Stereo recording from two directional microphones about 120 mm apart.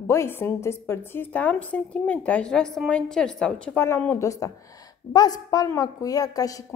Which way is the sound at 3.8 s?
20° left (ahead or behind).